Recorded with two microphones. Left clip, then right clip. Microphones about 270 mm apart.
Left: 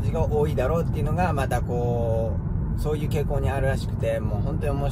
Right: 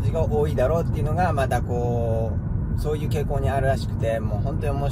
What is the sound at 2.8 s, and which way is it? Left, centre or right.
Speech, centre.